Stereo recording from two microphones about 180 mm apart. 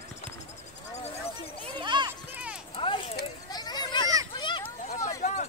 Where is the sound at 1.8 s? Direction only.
25° right (ahead or behind).